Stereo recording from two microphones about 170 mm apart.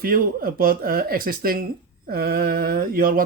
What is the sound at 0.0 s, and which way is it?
Speech, 60° right (ahead or behind).